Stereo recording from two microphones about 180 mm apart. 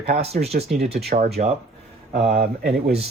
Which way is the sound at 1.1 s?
40° right (ahead or behind).